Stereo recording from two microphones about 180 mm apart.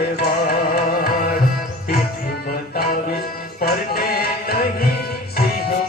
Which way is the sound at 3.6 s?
60° left (ahead or behind).